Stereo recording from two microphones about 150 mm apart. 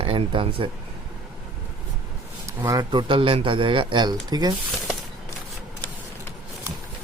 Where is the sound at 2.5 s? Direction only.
20° right (ahead or behind).